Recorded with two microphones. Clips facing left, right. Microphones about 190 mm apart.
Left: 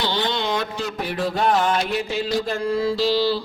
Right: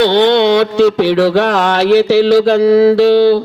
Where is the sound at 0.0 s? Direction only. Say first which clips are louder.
Right 15 dB; 70° right (ahead or behind).